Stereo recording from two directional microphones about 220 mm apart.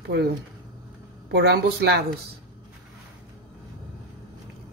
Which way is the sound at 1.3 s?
45° right (ahead or behind).